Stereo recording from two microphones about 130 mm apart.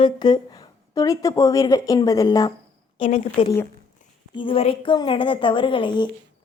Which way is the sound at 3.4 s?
40° left (ahead or behind).